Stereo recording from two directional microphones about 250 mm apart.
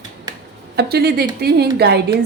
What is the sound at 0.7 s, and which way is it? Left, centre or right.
A woman's voice, right.